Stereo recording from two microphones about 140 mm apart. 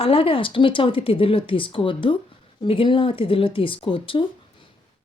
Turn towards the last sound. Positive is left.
turn(degrees=40)  # may be behind; listen again after turning